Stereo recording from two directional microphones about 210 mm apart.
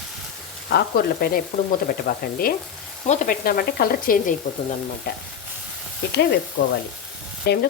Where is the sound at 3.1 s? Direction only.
40° left (ahead or behind).